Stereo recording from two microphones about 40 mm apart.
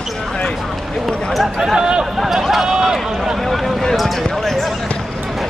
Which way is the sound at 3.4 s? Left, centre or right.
Centre.